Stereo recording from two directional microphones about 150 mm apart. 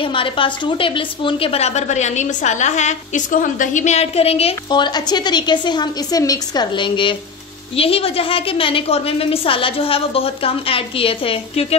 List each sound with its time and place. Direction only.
0.0 s a woman's voice: 35° left (ahead or behind)
4.6 s a woman's voice: 30° left (ahead or behind)